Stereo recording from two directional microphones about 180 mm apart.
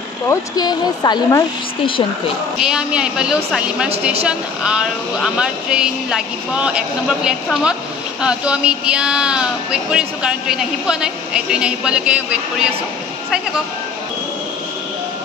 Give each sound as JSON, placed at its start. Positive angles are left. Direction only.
{"t": 0.3, "sound": "speech", "side_deg": 20}
{"t": 2.6, "sound": "speech", "side_deg": -5}